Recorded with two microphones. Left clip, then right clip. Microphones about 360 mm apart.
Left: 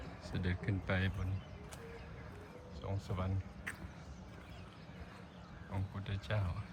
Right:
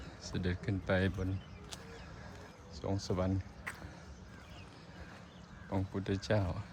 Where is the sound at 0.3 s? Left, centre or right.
Centre.